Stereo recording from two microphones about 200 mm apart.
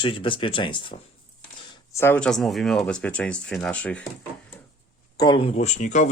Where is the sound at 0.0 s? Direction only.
25° left (ahead or behind).